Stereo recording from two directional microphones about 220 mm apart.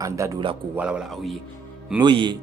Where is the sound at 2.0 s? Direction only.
20° right (ahead or behind).